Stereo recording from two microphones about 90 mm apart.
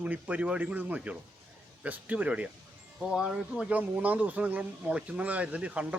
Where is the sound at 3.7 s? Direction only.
15° right (ahead or behind).